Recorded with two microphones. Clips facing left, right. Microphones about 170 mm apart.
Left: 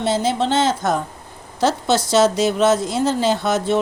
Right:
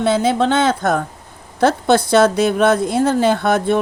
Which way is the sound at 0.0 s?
55° right (ahead or behind).